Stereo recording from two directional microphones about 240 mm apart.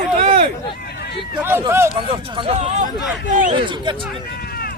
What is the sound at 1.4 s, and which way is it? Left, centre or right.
Speech, centre.